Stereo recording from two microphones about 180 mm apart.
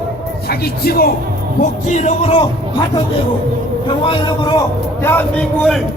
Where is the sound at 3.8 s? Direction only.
30° left (ahead or behind).